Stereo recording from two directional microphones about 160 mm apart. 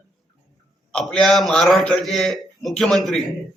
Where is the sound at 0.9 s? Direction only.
5° left (ahead or behind).